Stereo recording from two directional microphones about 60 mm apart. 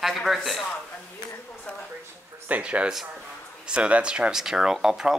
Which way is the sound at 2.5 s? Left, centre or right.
Right.